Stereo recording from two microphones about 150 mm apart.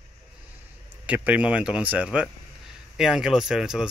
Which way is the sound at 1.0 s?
10° right (ahead or behind).